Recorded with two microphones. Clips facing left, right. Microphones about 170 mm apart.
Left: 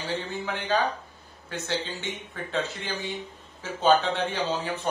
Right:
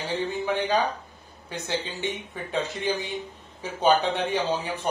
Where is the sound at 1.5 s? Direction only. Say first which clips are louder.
Even; 15° right (ahead or behind).